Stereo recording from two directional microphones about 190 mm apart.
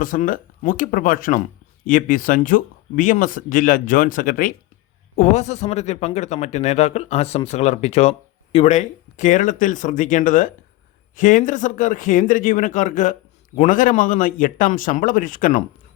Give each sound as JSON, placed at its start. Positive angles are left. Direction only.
{"t": 0.0, "sound": "speech", "side_deg": 45}
{"t": 5.1, "sound": "speech", "side_deg": 35}